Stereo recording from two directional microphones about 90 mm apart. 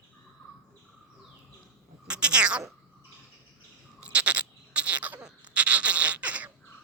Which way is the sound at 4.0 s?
15° right (ahead or behind).